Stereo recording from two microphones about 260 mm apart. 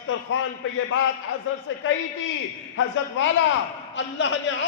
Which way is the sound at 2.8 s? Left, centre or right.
Left.